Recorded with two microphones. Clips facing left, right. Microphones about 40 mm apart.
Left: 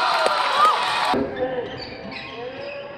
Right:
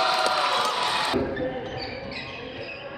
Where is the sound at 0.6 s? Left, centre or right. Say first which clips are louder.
Left 8 dB; left.